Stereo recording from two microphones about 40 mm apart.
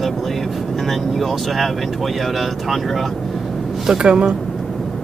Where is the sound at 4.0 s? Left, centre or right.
Right.